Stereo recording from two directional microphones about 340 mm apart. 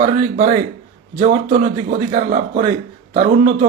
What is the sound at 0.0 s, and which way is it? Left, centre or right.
A man's voice, right.